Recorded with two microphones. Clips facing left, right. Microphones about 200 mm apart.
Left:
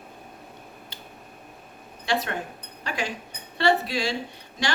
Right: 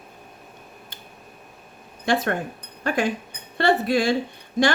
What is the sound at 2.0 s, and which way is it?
A woman's voice, 50° right (ahead or behind).